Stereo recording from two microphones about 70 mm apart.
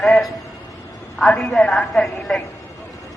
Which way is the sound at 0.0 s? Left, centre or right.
Centre.